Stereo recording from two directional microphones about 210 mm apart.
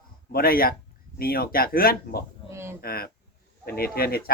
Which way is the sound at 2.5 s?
10° right (ahead or behind).